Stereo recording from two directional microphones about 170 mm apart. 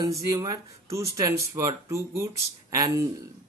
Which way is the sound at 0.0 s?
20° right (ahead or behind).